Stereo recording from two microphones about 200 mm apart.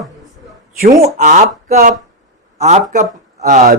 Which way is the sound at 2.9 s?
40° right (ahead or behind).